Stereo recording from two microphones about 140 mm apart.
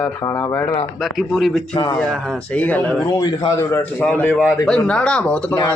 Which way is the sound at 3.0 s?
30° left (ahead or behind).